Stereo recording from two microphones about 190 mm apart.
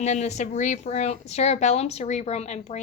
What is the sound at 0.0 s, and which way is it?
A woman's voice, 35° left (ahead or behind).